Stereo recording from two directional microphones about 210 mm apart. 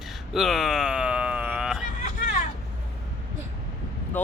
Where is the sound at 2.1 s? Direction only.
40° left (ahead or behind).